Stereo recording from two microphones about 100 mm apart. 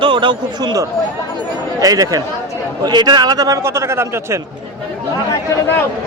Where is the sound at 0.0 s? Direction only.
55° right (ahead or behind); by 4.4 s 25° right (ahead or behind).